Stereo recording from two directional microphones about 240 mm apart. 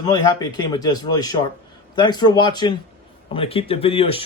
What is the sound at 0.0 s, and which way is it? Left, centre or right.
Speech, centre.